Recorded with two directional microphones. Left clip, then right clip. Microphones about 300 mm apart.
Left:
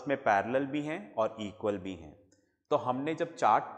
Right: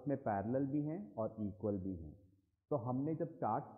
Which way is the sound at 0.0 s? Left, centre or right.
Centre.